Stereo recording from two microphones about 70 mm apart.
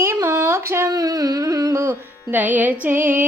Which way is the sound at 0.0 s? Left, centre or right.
Right.